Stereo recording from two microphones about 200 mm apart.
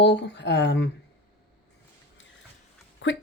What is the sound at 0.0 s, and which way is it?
Speech, 60° left (ahead or behind).